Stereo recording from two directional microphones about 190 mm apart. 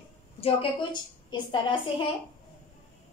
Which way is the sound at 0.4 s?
30° left (ahead or behind).